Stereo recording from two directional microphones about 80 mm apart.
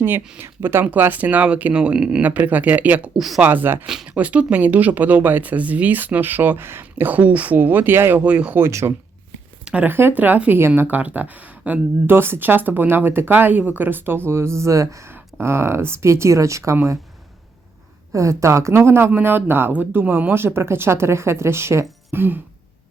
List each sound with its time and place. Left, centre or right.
0.3 s speech: right
3.2 s speech: centre
3.4 s speech: right
3.8 s speech: centre
8.6 s speech: right
9.6 s speech: centre; by 16.7 s right
18.1 s speech: right